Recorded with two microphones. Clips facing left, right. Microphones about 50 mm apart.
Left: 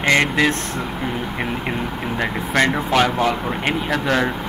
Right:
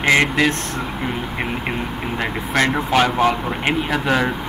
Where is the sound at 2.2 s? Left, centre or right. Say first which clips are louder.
Left 1 dB; centre.